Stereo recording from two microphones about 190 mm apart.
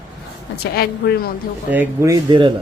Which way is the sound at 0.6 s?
55° left (ahead or behind).